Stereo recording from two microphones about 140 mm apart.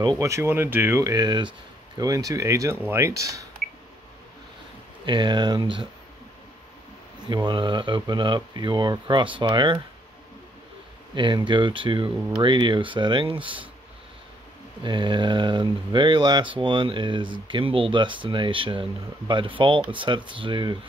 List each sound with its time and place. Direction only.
0.0 s speech: 25° right (ahead or behind)
5.0 s speech: 35° right (ahead or behind)
7.4 s speech: 35° right (ahead or behind)
11.1 s speech: 35° right (ahead or behind)
14.8 s speech: 35° right (ahead or behind)